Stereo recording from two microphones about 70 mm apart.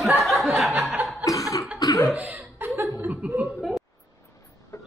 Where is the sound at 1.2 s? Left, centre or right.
Left.